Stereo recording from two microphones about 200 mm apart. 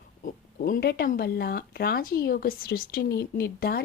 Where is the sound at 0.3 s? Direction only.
45° left (ahead or behind).